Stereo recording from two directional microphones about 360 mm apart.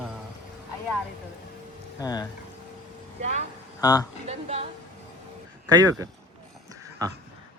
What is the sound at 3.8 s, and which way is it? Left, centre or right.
Speech, centre.